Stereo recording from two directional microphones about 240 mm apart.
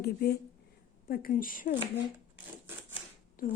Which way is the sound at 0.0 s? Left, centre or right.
Left.